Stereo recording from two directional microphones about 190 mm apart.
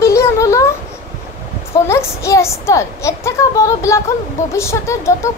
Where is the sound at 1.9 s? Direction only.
15° left (ahead or behind).